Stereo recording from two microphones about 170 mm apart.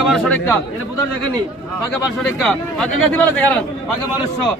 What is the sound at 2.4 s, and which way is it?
Speech, 5° left (ahead or behind).